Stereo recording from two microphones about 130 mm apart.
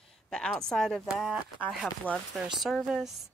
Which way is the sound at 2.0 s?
10° left (ahead or behind).